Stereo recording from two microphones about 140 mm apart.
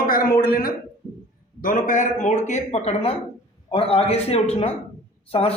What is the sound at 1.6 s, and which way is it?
A man's voice, 75° left (ahead or behind).